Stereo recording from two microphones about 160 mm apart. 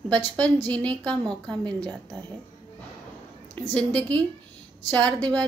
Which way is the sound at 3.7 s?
10° left (ahead or behind).